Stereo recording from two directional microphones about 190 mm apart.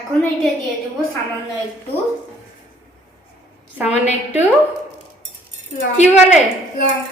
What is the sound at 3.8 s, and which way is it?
Speech, 35° left (ahead or behind).